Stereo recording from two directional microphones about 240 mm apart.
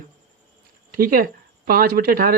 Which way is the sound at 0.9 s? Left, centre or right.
Right.